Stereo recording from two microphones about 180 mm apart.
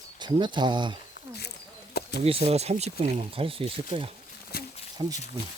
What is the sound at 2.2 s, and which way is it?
Speech, 35° right (ahead or behind).